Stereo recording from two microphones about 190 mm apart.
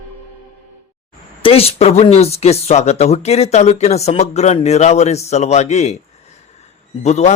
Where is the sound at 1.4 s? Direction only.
30° left (ahead or behind).